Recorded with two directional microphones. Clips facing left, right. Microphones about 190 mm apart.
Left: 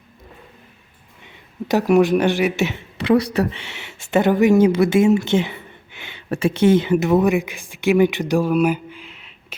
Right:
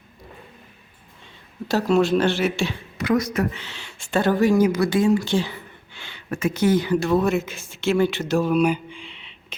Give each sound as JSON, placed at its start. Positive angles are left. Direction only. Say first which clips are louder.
{"t": 1.6, "sound": "a woman's voice", "louder": "left 4 dB", "side_deg": 20}
{"t": 6.3, "sound": "speech", "louder": "left 4 dB", "side_deg": 30}